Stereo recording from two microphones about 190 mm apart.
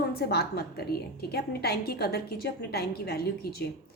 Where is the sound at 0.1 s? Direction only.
55° left (ahead or behind).